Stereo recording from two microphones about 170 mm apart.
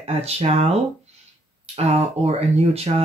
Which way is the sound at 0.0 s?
35° right (ahead or behind).